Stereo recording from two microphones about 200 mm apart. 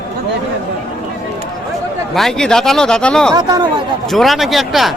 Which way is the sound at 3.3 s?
20° right (ahead or behind).